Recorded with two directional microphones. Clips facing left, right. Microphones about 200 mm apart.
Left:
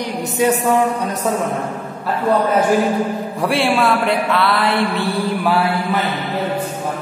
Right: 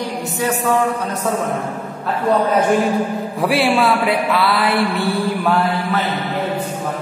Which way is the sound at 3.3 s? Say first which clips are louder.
Right 1 dB; centre (ahead or behind).